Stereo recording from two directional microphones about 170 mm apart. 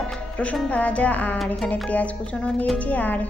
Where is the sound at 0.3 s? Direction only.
10° left (ahead or behind).